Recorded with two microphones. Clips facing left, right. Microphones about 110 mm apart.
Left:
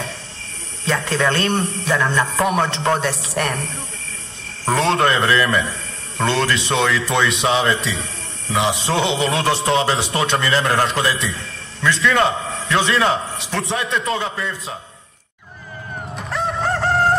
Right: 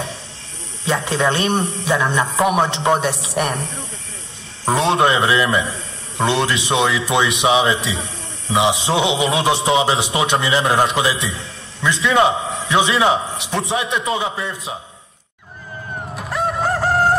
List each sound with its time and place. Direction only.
0.8 s a man's voice: 25° right (ahead or behind)
4.8 s a man's voice: 20° right (ahead or behind)
16.2 s crowing: 5° right (ahead or behind)